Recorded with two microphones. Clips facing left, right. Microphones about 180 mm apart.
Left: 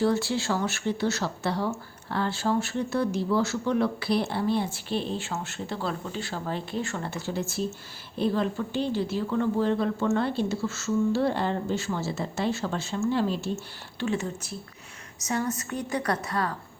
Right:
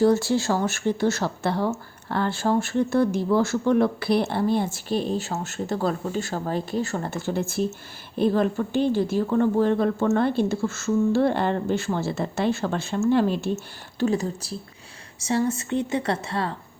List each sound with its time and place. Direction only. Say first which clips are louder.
0.0 s speech: right 5 dB; 45° right (ahead or behind)
14.0 s a woman's voice: right 5 dB; 35° right (ahead or behind)